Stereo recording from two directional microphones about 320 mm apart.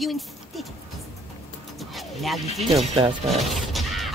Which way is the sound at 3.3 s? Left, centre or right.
Centre.